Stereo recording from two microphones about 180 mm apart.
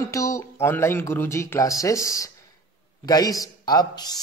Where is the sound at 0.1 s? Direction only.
15° left (ahead or behind).